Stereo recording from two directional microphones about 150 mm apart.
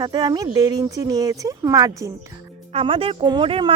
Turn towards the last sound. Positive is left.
turn(degrees=-35)  # may be behind; listen again after turning